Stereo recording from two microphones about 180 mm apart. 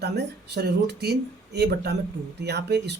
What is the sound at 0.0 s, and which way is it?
Speech, 65° right (ahead or behind).